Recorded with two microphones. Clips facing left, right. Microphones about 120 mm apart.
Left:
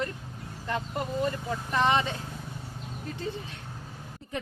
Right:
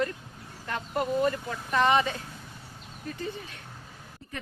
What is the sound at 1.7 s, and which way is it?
Speech, 20° left (ahead or behind).